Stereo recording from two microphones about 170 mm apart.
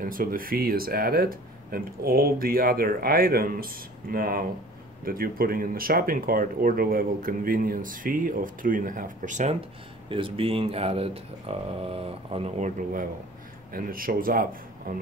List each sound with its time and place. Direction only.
0.0 s speech: 55° right (ahead or behind)